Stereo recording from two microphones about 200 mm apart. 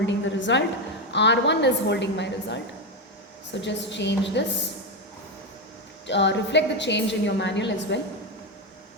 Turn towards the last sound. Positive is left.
turn(degrees=60)  # may be behind; listen again after turning